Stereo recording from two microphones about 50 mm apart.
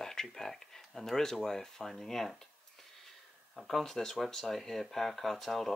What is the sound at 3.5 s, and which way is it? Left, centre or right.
Speech, centre.